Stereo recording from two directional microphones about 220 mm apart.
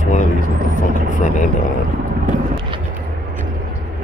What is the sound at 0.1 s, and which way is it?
Vehicle, 35° left (ahead or behind).